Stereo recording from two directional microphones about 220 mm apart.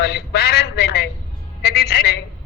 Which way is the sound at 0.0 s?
45° left (ahead or behind).